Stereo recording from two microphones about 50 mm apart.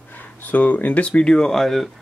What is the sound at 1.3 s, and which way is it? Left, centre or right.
Speech, centre.